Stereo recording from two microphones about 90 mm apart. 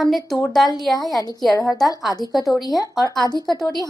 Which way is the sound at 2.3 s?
Centre (ahead or behind).